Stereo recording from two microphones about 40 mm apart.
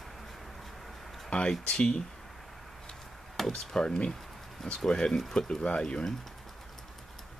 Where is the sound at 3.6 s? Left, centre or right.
Centre.